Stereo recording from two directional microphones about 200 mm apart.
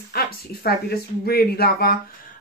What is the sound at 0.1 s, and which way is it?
Speech, 50° left (ahead or behind).